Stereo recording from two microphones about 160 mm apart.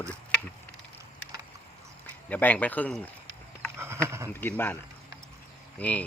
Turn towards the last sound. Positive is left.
turn(degrees=10)  # may be behind; listen again after turning